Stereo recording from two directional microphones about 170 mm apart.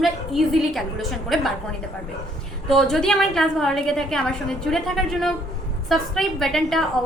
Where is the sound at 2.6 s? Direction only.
5° left (ahead or behind).